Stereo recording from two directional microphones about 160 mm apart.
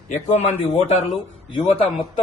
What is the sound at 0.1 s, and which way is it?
Speech, 45° left (ahead or behind).